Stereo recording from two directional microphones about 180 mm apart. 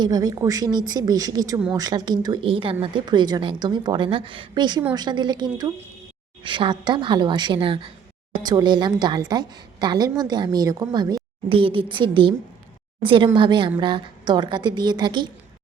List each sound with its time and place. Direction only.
0.0 s a woman's voice: 20° right (ahead or behind)